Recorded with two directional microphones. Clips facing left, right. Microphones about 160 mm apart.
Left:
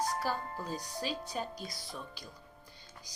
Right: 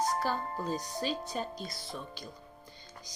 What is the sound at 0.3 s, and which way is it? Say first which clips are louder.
Speech: right 4 dB; 30° right (ahead or behind).